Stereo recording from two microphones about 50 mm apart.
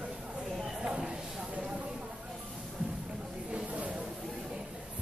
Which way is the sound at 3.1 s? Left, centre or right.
Centre.